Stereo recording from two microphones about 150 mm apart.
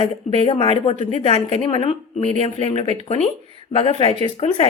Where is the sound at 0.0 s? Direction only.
40° left (ahead or behind).